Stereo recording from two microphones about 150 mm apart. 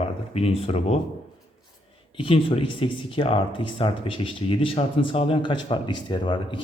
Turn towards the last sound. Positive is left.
turn(degrees=30)  # may be behind; listen again after turning